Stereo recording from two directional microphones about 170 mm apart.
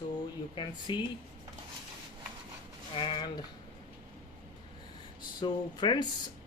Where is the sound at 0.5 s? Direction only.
25° left (ahead or behind).